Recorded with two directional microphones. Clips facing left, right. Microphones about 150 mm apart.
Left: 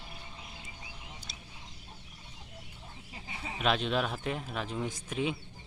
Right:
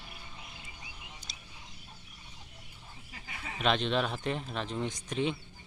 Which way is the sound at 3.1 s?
25° left (ahead or behind).